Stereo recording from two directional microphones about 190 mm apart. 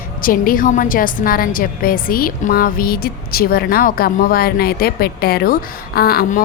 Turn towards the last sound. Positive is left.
turn(degrees=55)  # may be behind; listen again after turning